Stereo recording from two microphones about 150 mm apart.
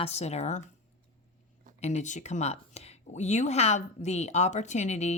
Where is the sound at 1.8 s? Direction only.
50° left (ahead or behind).